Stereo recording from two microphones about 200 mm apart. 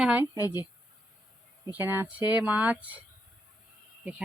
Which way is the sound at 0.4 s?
20° left (ahead or behind).